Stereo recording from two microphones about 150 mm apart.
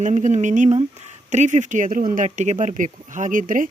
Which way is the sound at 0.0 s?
55° right (ahead or behind).